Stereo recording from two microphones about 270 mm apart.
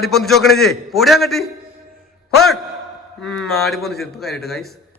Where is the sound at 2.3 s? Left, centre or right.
Centre.